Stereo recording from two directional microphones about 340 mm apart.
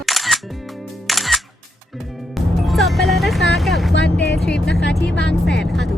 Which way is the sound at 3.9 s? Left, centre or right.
Left.